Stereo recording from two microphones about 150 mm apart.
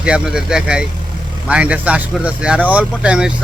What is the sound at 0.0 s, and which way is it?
Speech, 5° right (ahead or behind).